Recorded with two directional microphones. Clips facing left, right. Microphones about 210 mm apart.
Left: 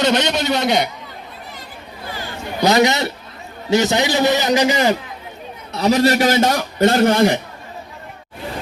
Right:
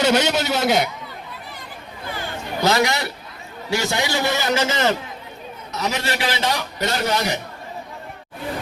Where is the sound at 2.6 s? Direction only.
20° left (ahead or behind).